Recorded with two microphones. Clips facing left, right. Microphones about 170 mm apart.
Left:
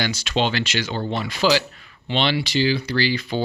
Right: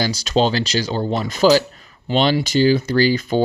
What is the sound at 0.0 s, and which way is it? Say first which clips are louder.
Speech: right 5 dB; 35° right (ahead or behind).